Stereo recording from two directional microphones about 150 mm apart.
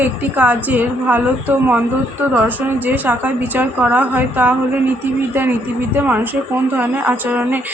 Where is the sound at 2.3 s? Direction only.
10° right (ahead or behind).